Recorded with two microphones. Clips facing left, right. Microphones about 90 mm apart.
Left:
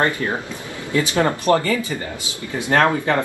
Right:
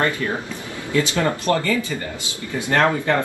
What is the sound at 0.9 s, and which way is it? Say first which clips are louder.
Speech: left 1 dB; 20° left (ahead or behind).